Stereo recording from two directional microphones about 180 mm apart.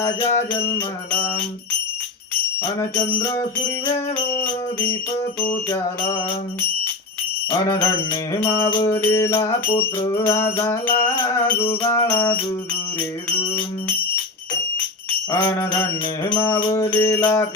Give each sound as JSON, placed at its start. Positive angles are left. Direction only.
{"t": 0.0, "sound": "music", "side_deg": 20}
{"t": 0.7, "sound": "mantra", "side_deg": 15}
{"t": 2.6, "sound": "mantra", "side_deg": 15}
{"t": 5.6, "sound": "mantra", "side_deg": 15}
{"t": 7.5, "sound": "music", "side_deg": 15}
{"t": 8.4, "sound": "mantra", "side_deg": 15}
{"t": 9.7, "sound": "music", "side_deg": 30}
{"t": 10.2, "sound": "mantra", "side_deg": 15}
{"t": 15.3, "sound": "mantra", "side_deg": 15}